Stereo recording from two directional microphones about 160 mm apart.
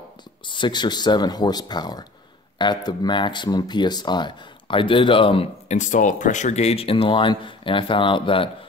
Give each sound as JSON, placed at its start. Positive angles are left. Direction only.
{"t": 0.5, "sound": "speech", "side_deg": 30}
{"t": 5.8, "sound": "speech", "side_deg": 50}